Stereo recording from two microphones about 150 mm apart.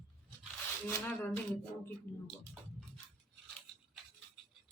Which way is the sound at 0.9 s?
20° left (ahead or behind).